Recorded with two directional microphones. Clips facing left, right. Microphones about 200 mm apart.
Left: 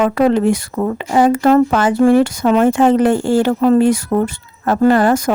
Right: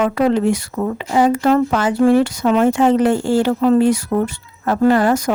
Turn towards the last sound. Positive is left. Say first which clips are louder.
# left 2 dB
turn(degrees=50)  # may be behind; listen again after turning